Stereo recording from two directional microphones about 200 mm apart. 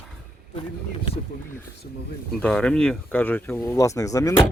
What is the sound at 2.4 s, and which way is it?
Speech, 5° left (ahead or behind).